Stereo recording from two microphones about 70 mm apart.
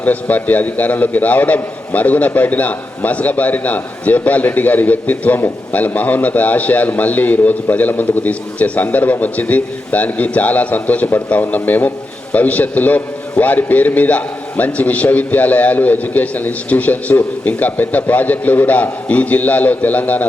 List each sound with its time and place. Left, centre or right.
0.0 s a man's voice: left